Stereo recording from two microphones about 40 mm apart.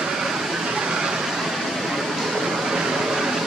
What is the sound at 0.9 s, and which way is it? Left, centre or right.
Vehicle, centre.